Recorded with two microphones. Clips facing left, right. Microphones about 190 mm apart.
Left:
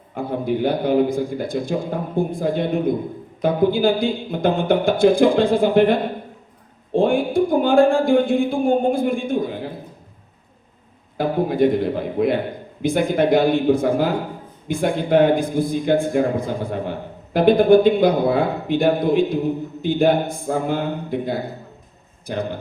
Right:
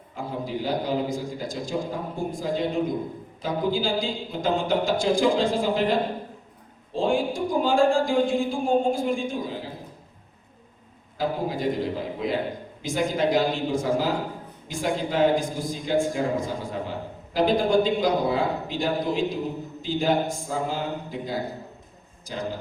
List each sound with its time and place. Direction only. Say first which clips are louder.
0.1 s a man's voice: left 8 dB; 60° left (ahead or behind)
11.2 s a man's voice: left 8 dB; 60° left (ahead or behind)